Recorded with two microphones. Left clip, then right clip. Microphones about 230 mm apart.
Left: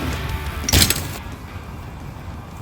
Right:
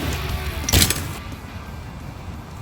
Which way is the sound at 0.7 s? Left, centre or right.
Left.